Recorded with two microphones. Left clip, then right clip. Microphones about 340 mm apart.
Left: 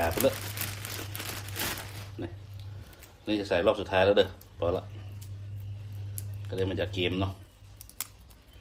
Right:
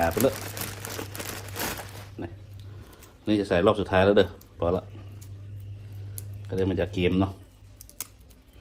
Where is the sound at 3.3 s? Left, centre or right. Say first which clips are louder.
Right 4 dB; centre.